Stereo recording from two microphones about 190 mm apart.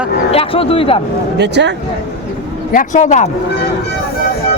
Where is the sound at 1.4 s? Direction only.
65° right (ahead or behind).